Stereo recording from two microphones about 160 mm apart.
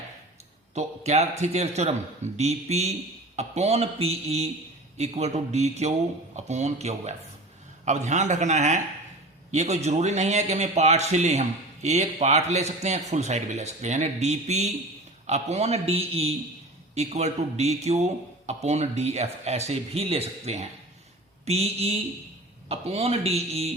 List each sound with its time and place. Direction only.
0.7 s a man's voice: 45° right (ahead or behind)